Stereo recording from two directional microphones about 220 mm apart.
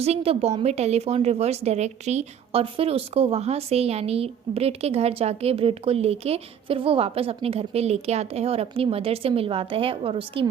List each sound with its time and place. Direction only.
0.0 s a woman's voice: 25° right (ahead or behind)